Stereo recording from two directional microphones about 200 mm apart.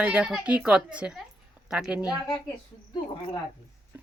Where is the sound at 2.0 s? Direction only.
20° left (ahead or behind).